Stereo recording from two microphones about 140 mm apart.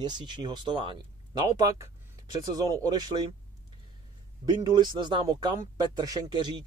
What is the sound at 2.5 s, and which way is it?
Speech, 25° right (ahead or behind).